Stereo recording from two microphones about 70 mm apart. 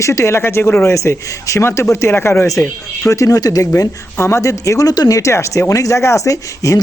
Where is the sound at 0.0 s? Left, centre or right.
Left.